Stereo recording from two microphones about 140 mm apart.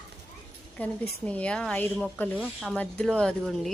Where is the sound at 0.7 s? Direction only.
10° left (ahead or behind).